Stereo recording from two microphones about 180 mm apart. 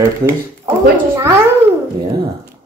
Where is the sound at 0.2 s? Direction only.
15° right (ahead or behind).